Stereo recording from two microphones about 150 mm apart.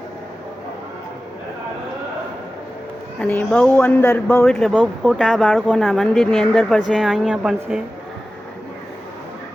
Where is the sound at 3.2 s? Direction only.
10° left (ahead or behind); by 7.9 s 5° right (ahead or behind).